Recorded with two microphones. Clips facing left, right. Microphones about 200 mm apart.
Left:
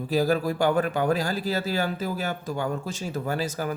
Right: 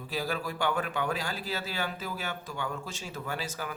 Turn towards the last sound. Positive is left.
turn(degrees=40)  # may be behind; listen again after turning